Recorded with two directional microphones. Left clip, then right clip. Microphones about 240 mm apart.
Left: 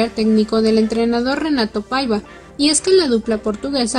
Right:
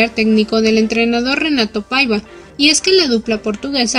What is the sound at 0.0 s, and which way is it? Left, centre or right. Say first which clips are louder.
A woman's voice: right 3 dB; right.